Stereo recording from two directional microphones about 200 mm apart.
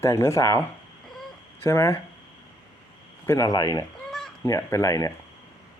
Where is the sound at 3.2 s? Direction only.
15° left (ahead or behind).